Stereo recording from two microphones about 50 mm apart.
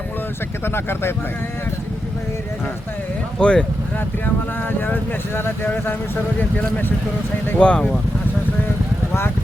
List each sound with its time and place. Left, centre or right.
0.6 s speech: left
3.3 s speech: centre
5.7 s speech: left
7.6 s speech: left